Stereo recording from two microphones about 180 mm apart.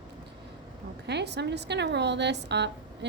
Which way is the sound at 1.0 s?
70° right (ahead or behind).